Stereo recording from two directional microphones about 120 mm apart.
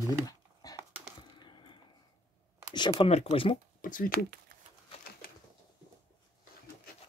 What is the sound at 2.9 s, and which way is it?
Speech, 55° left (ahead or behind).